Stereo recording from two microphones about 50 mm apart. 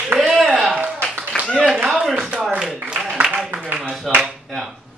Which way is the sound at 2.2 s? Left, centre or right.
Right.